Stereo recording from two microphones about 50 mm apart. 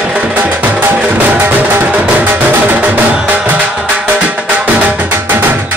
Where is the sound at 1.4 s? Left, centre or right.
Right.